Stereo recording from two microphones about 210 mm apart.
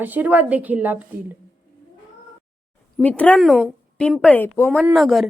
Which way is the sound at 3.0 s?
5° left (ahead or behind).